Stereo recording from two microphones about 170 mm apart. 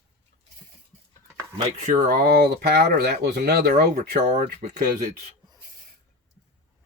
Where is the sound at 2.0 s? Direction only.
60° right (ahead or behind).